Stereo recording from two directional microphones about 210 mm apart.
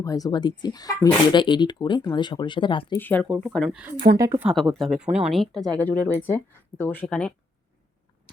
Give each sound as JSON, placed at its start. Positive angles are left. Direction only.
{"t": 0.0, "sound": "speech", "side_deg": 15}
{"t": 3.0, "sound": "speech", "side_deg": 10}
{"t": 4.2, "sound": "speech", "side_deg": -15}
{"t": 4.4, "sound": "speech", "side_deg": 0}